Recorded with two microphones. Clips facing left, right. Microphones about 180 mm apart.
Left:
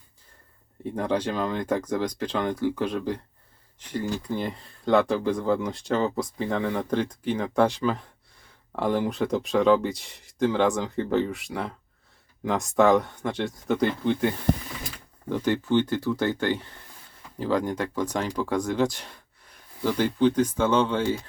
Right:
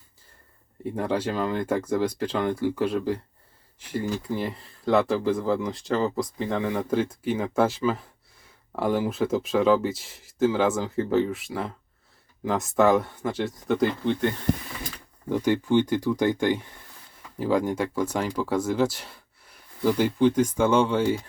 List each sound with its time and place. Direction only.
0.9 s speech: 5° right (ahead or behind)
15.3 s speech: 10° right (ahead or behind)